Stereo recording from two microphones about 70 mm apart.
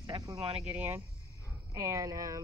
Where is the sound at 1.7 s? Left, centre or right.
Right.